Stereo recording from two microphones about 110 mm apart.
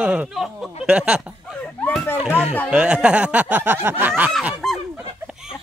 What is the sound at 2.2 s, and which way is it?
Speech, 5° right (ahead or behind).